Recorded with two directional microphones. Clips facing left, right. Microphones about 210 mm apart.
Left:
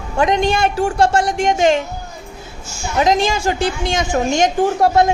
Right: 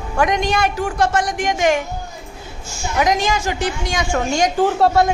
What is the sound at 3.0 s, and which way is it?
A woman's voice, 25° left (ahead or behind).